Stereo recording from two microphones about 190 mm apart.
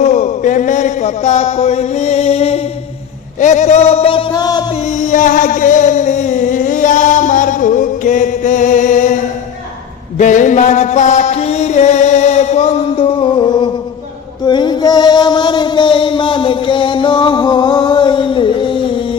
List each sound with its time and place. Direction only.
0.0 s a sound: 40° left (ahead or behind); by 4.6 s 20° left (ahead or behind)
4.8 s music: 40° left (ahead or behind)
14.4 s music: 25° left (ahead or behind)